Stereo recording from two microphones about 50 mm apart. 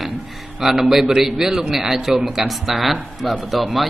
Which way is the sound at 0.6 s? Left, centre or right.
Centre.